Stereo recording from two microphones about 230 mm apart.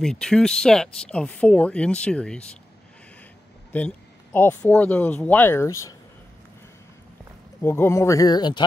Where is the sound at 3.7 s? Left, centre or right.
Centre.